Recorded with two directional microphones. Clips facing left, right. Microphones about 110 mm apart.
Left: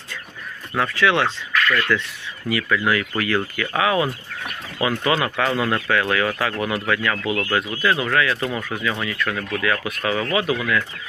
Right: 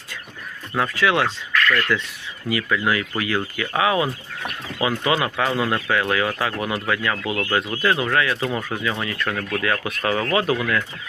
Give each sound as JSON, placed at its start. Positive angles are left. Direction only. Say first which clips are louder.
{"t": 0.8, "sound": "speech", "louder": "left 1 dB", "side_deg": -15}
{"t": 2.5, "sound": "speech", "louder": "left 1 dB", "side_deg": -25}